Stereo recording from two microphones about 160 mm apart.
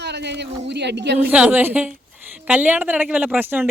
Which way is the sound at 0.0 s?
90° right.